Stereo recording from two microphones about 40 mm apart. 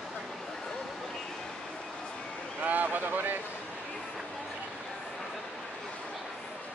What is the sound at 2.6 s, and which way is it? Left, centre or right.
Vehicle, right.